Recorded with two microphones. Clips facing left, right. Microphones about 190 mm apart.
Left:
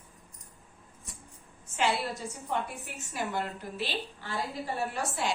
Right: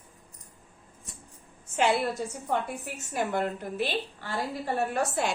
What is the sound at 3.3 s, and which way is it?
Speech, 55° right (ahead or behind).